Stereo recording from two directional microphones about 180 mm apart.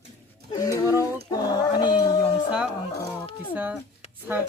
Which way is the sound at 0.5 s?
20° left (ahead or behind).